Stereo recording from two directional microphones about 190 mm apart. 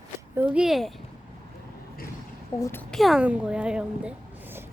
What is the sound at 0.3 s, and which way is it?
Speech, 5° right (ahead or behind).